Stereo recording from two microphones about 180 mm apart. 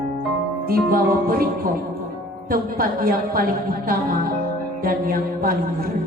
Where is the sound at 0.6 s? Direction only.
55° right (ahead or behind).